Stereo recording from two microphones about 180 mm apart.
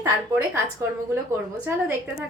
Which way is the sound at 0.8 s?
20° right (ahead or behind).